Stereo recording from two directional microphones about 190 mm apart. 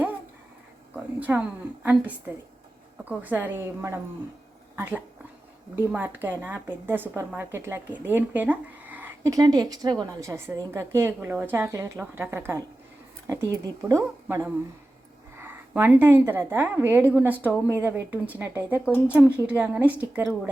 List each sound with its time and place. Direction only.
1.2 s a woman's voice: 10° right (ahead or behind)